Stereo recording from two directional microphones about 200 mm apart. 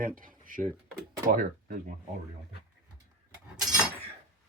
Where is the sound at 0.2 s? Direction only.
45° right (ahead or behind).